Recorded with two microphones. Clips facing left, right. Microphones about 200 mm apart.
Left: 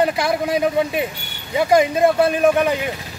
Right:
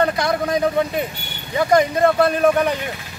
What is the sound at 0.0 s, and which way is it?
Speech, 15° left (ahead or behind).